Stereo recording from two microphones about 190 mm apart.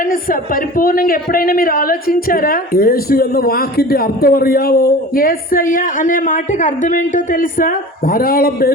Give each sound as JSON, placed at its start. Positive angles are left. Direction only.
{"t": 0.1, "sound": "a woman's voice", "side_deg": 50}